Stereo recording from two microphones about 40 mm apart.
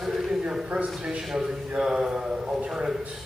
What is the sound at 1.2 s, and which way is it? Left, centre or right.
A man's voice, centre.